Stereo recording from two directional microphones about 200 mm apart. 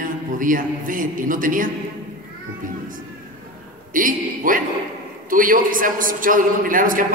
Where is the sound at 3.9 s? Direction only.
40° right (ahead or behind).